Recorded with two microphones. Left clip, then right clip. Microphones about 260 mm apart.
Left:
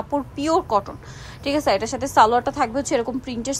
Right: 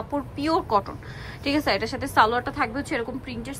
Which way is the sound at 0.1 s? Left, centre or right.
Centre.